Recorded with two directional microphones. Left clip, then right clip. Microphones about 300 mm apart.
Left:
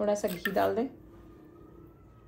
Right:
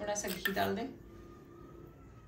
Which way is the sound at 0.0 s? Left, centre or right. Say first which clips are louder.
Left 9 dB; centre.